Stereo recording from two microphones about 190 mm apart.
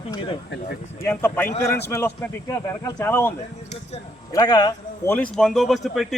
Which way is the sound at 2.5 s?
15° left (ahead or behind).